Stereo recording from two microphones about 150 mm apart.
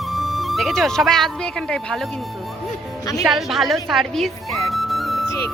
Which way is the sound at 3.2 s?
Centre (ahead or behind).